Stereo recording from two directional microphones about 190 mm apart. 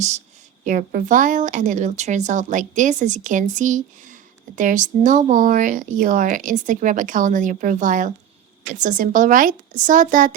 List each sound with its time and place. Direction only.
0.6 s a woman's voice: 40° right (ahead or behind)